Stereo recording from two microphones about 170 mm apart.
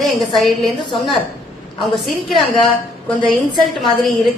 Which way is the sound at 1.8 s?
Centre (ahead or behind).